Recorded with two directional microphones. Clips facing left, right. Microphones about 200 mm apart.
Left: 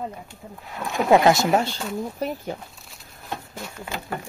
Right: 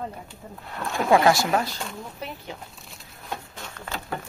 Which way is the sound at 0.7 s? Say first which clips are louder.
Left 2 dB; 5° left (ahead or behind).